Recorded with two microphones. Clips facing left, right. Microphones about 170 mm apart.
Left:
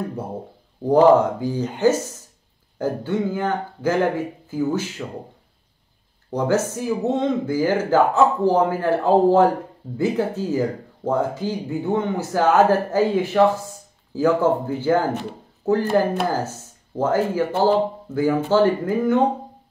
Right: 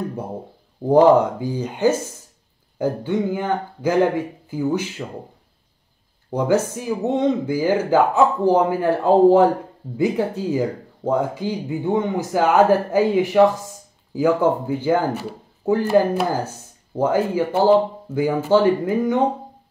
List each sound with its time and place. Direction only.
0.8 s speech: 15° right (ahead or behind)
6.3 s speech: 15° right (ahead or behind)